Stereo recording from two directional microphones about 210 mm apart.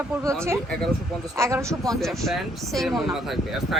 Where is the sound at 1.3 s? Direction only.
15° right (ahead or behind).